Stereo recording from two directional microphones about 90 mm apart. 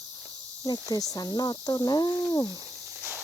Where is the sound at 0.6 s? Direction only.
45° left (ahead or behind).